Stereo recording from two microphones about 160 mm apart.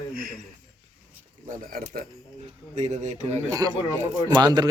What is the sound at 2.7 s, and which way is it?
Speech, 45° right (ahead or behind).